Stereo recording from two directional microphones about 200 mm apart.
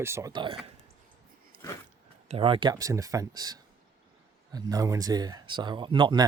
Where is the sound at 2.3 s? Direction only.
25° right (ahead or behind).